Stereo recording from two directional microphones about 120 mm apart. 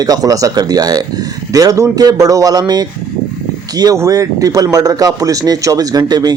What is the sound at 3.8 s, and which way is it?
Speech, 30° right (ahead or behind).